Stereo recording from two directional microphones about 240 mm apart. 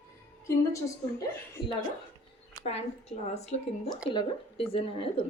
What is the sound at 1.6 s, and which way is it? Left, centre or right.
Speech, centre.